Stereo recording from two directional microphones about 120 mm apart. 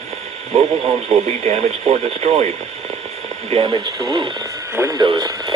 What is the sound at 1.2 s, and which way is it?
Speech, 60° right (ahead or behind).